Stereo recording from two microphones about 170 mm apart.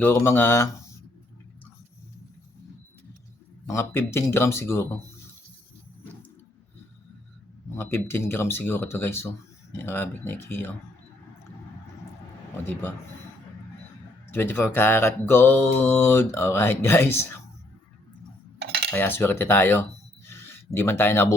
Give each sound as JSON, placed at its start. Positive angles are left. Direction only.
{"t": 0.0, "sound": "mantra", "side_deg": 10}
{"t": 3.7, "sound": "mantra", "side_deg": 15}
{"t": 7.8, "sound": "mantra", "side_deg": 15}
{"t": 14.3, "sound": "mantra", "side_deg": 10}
{"t": 18.6, "sound": "cutlery", "side_deg": -75}
{"t": 18.9, "sound": "mantra", "side_deg": 10}
{"t": 20.3, "sound": "speech", "side_deg": 15}